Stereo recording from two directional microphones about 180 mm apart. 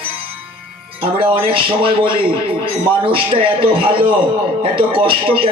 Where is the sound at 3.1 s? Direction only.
30° right (ahead or behind).